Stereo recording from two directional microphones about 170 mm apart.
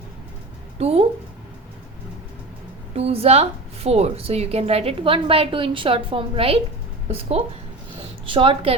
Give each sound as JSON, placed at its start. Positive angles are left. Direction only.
{"t": 0.8, "sound": "a woman's voice", "side_deg": -35}
{"t": 2.9, "sound": "a woman's voice", "side_deg": -35}